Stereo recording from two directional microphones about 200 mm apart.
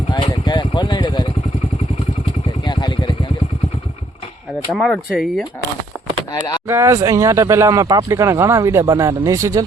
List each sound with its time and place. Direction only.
0.1 s vehicle: 20° left (ahead or behind)
2.6 s vehicle: 20° left (ahead or behind)
4.7 s speech: centre (ahead or behind)
6.3 s speech: 20° left (ahead or behind)
6.7 s speech: 15° right (ahead or behind)